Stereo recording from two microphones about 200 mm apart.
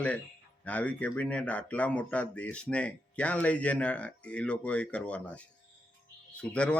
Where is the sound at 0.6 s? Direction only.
5° left (ahead or behind).